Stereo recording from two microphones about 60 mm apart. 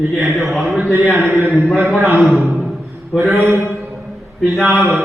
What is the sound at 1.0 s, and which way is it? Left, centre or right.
Speech, right.